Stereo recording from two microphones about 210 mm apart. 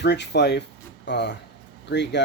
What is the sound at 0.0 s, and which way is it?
Speech, 55° left (ahead or behind).